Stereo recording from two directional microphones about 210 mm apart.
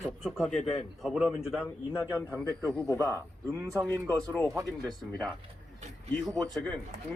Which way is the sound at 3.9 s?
10° left (ahead or behind).